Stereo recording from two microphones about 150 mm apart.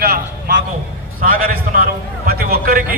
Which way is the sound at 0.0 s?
90° right.